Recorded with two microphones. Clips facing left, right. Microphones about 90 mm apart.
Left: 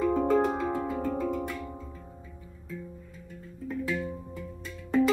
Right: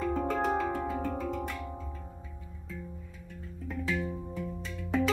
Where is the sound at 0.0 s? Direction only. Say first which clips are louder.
Left 5 dB; 5° left (ahead or behind).